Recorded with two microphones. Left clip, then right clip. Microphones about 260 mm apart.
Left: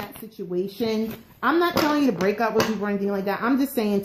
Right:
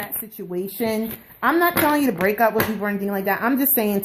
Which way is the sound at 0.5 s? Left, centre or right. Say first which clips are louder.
Right 1 dB; right.